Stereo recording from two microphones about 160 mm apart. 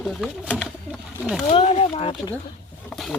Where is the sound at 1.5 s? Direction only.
35° left (ahead or behind).